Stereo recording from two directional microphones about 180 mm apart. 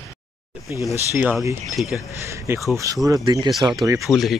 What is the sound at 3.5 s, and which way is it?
Speech, centre (ahead or behind).